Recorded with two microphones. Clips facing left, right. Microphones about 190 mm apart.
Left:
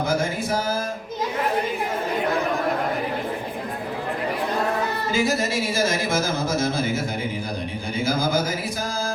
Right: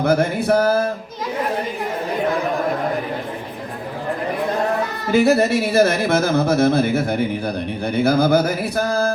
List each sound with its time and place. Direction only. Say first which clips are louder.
0.0 s speech: right 6 dB; 65° right (ahead or behind)
5.1 s speech: right 9 dB; 65° right (ahead or behind)